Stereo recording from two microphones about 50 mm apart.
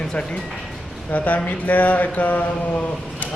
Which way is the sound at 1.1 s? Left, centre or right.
Left.